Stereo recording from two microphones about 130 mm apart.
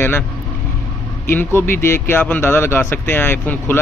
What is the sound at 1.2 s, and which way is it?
Speech, 15° left (ahead or behind).